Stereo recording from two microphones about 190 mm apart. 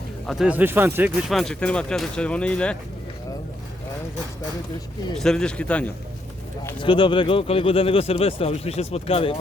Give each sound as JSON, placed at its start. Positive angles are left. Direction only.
{"t": 0.3, "sound": "speech", "side_deg": -5}
{"t": 1.3, "sound": "speech", "side_deg": 0}
{"t": 5.2, "sound": "speech", "side_deg": 5}
{"t": 6.7, "sound": "speech", "side_deg": 25}